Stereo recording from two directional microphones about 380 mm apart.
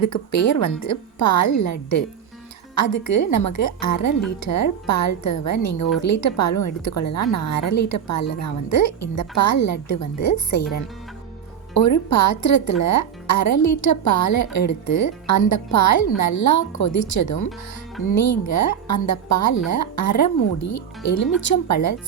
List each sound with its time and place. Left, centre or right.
0.1 s a woman's voice: left
11.7 s a woman's voice: left